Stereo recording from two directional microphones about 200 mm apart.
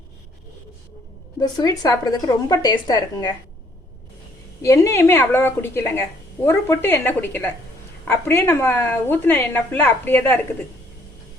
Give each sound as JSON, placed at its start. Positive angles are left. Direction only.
{"t": 1.4, "sound": "a woman's voice", "side_deg": 20}
{"t": 4.6, "sound": "a woman's voice", "side_deg": 15}